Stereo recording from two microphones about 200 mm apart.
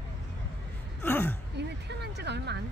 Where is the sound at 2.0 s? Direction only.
55° right (ahead or behind).